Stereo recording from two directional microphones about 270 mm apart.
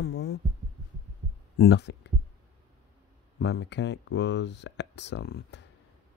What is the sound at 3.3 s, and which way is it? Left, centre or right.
Speech, left.